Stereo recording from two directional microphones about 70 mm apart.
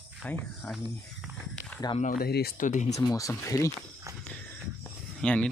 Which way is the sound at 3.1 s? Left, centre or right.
Left.